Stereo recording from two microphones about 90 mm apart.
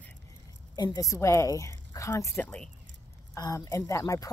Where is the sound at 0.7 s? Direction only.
40° left (ahead or behind).